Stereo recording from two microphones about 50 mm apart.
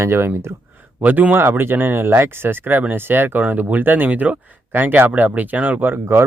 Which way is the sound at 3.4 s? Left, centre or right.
Right.